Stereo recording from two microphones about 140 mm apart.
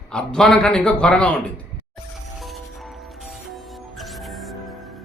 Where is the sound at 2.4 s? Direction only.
Centre (ahead or behind).